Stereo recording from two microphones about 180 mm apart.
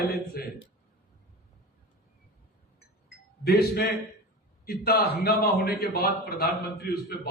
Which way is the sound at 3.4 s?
60° left (ahead or behind).